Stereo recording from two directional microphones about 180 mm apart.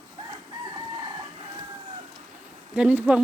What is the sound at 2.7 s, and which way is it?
Speech, 10° right (ahead or behind).